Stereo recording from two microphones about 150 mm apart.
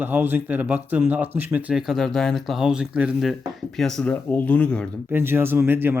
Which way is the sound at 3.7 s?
5° left (ahead or behind).